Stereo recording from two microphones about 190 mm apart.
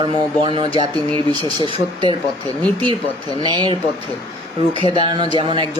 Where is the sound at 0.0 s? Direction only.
25° right (ahead or behind).